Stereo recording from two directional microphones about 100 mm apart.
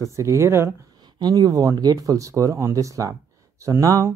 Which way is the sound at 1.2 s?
40° right (ahead or behind).